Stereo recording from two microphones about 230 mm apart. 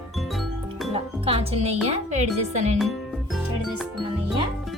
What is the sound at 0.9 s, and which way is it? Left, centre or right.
Music, right.